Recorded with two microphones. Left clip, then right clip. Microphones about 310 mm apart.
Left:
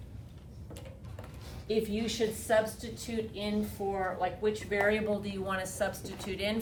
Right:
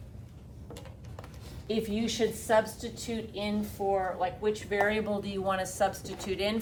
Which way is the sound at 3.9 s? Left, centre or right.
Centre.